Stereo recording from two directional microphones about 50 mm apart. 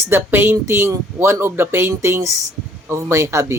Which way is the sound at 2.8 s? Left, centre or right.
Right.